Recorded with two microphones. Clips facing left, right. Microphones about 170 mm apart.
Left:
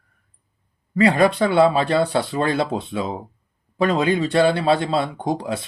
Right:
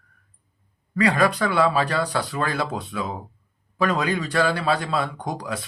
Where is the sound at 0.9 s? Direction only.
25° left (ahead or behind).